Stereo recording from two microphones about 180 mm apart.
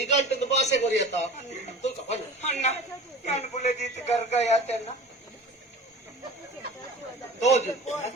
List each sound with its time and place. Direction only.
0.0 s a sound: 40° left (ahead or behind)
3.2 s speech: 40° left (ahead or behind)
7.4 s a man's voice: 40° left (ahead or behind)